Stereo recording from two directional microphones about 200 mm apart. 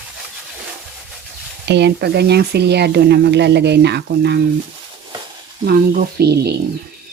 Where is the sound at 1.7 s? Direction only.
55° right (ahead or behind).